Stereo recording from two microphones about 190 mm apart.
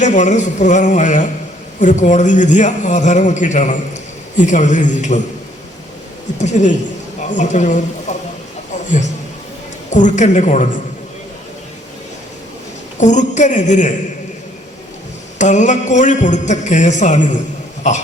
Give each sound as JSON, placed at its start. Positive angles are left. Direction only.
{"t": 0.0, "sound": "a man's voice", "side_deg": 40}
{"t": 6.4, "sound": "a man's voice", "side_deg": 40}
{"t": 9.9, "sound": "a man's voice", "side_deg": 40}
{"t": 13.0, "sound": "a man's voice", "side_deg": 40}
{"t": 15.4, "sound": "a man's voice", "side_deg": 40}